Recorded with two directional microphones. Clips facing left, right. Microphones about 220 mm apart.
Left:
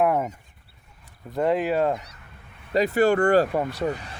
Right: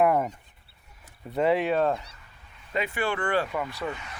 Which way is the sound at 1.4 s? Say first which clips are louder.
Left 1 dB; centre (ahead or behind).